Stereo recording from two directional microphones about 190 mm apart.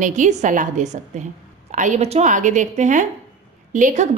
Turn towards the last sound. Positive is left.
turn(degrees=-40)  # may be behind; listen again after turning